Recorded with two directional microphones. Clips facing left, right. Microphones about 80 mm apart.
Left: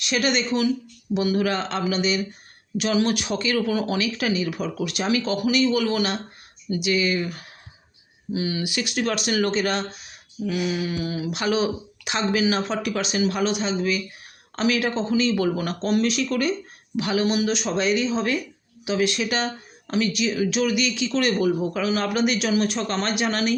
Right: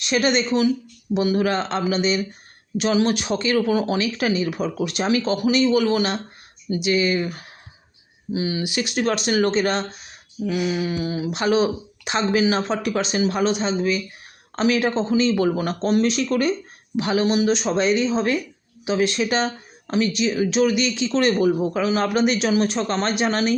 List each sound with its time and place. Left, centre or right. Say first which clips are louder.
0.0 s speech: right 3 dB; right